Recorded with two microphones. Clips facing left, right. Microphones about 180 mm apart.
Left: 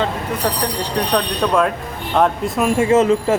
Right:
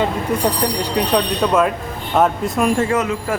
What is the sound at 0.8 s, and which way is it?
Speech, 10° right (ahead or behind).